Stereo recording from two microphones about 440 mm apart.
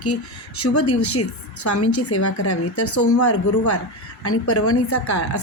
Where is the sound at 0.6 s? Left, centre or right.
Left.